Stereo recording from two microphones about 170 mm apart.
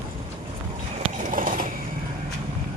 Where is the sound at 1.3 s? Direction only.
50° right (ahead or behind).